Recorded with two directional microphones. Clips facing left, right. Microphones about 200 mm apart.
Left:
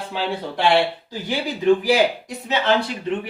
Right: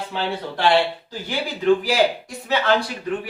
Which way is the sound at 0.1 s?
15° left (ahead or behind).